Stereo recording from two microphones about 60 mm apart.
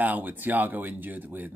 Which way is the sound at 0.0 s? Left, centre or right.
Right.